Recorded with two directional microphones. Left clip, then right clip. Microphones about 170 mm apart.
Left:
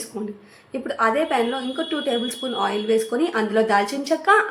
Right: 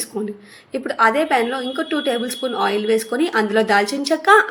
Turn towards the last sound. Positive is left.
turn(degrees=-20)  # may be behind; listen again after turning